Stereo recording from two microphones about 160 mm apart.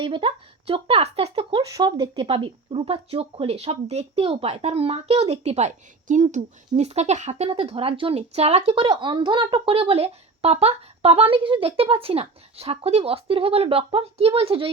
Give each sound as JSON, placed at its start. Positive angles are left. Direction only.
{"t": 0.0, "sound": "speech", "side_deg": -35}